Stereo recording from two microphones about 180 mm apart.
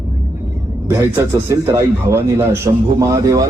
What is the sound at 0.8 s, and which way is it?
Speech, 15° right (ahead or behind).